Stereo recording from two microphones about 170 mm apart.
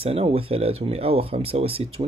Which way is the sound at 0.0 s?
35° right (ahead or behind).